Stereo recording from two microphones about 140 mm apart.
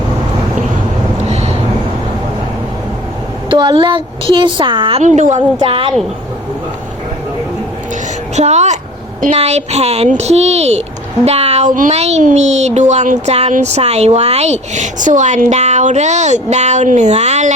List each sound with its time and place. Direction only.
1.3 s a sound: 50° right (ahead or behind)
3.5 s a woman's voice: 35° right (ahead or behind)
5.0 s a woman's voice: 60° right (ahead or behind)
5.5 s a woman's voice: 40° right (ahead or behind)
8.4 s speech: 55° right (ahead or behind)
11.7 s speech: 70° right (ahead or behind)
11.9 s a woman's voice: 50° right (ahead or behind)